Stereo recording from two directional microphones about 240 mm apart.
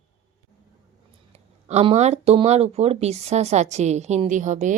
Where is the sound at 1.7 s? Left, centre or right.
Right.